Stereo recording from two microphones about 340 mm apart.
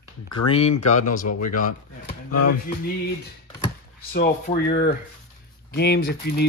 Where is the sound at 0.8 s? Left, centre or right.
Left.